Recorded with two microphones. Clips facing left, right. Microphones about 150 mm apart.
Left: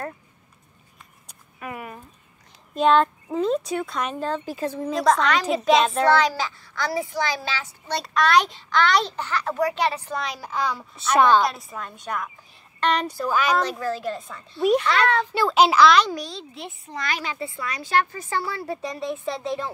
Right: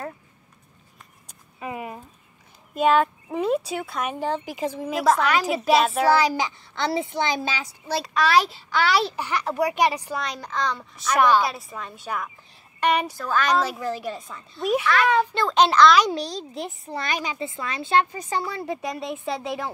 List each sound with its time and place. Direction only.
1.6 s a sound: 20° right (ahead or behind)
2.7 s a child's voice: 5° right (ahead or behind)
7.9 s a child's voice: centre (ahead or behind)
10.2 s a woman's voice: 5° left (ahead or behind)
13.2 s a child's voice: 10° left (ahead or behind)
13.7 s a child's voice: 15° right (ahead or behind)
14.3 s a woman's voice: centre (ahead or behind)
16.1 s a woman's voice: 35° right (ahead or behind)
17.0 s a woman's voice: 15° right (ahead or behind)